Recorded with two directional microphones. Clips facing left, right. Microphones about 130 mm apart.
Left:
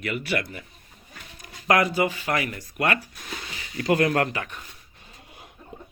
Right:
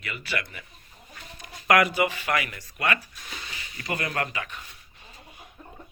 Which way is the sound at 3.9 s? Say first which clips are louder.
Left 8 dB; 75° left (ahead or behind).